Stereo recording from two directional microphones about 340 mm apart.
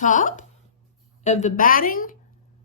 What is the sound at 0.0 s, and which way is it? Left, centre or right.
Speech, left.